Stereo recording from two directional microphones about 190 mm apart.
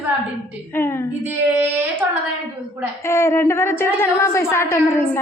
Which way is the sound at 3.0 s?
15° left (ahead or behind).